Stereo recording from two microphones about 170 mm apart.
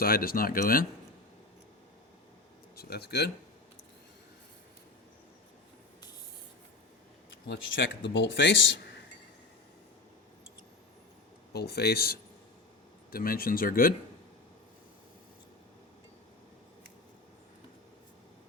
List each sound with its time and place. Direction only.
0.0 s speech: 60° left (ahead or behind)
2.7 s speech: 70° left (ahead or behind)
7.4 s speech: 90° left
11.5 s speech: 70° left (ahead or behind)